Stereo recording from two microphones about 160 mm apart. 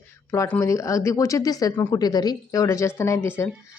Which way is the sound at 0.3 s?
10° left (ahead or behind).